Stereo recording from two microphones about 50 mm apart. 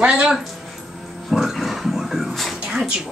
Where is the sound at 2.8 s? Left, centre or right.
Centre.